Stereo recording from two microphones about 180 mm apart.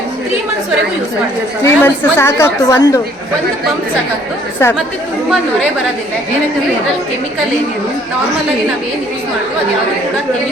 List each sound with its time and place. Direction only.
1.6 s a woman's voice: 15° left (ahead or behind)
4.6 s a woman's voice: 15° left (ahead or behind)